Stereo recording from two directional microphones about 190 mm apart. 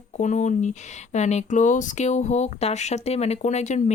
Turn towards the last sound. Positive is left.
turn(degrees=35)  # may be behind; listen again after turning